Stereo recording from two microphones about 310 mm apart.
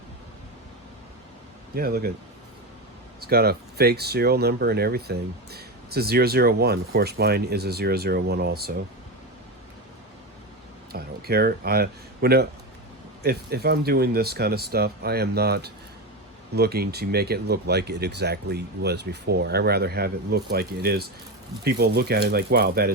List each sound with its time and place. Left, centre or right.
1.7 s speech: right
3.2 s speech: right
10.9 s speech: right